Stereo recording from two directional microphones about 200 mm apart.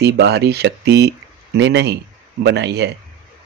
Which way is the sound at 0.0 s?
55° right (ahead or behind).